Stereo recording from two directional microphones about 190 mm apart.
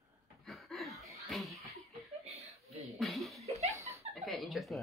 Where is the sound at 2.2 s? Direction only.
35° right (ahead or behind).